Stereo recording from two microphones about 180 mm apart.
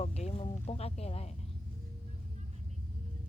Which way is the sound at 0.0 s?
35° left (ahead or behind).